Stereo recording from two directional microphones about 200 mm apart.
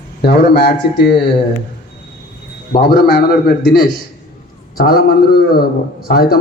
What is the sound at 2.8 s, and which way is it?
A man's voice, 50° left (ahead or behind).